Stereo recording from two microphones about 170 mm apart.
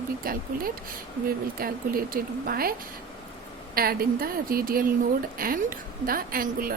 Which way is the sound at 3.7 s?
60° right (ahead or behind).